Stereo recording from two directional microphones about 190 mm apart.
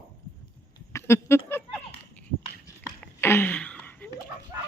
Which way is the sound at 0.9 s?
15° left (ahead or behind).